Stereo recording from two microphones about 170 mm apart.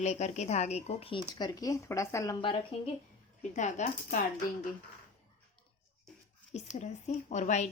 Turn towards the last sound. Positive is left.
turn(degrees=45)  # may be behind; listen again after turning